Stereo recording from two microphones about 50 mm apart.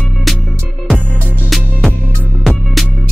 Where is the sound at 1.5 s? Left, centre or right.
Centre.